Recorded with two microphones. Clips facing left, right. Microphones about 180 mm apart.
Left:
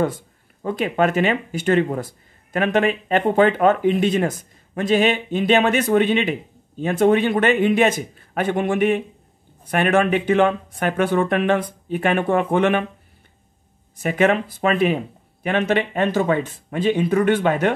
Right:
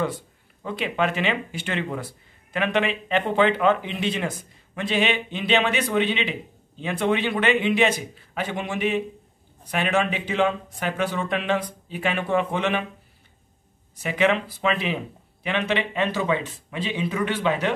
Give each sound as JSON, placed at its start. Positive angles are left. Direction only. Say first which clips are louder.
{"t": 0.0, "sound": "speech", "louder": "left 5 dB", "side_deg": 45}
{"t": 13.9, "sound": "speech", "louder": "left 4 dB", "side_deg": 50}